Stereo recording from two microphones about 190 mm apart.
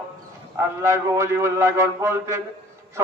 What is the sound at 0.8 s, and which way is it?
Mantra, 15° right (ahead or behind).